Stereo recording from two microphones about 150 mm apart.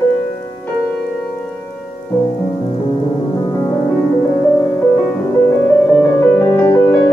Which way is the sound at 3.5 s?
20° left (ahead or behind).